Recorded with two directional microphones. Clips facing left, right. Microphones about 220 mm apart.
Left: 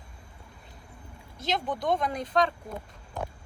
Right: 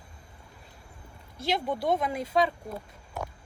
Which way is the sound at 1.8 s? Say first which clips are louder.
Even; 5° right (ahead or behind).